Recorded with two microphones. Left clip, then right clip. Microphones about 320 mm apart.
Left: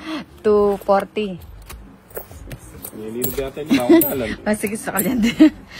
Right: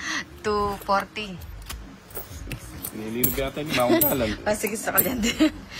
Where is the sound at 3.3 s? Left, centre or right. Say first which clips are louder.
Left 3 dB; right.